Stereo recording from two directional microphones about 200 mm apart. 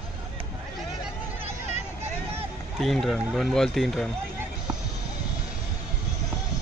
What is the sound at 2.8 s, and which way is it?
Speech, centre (ahead or behind).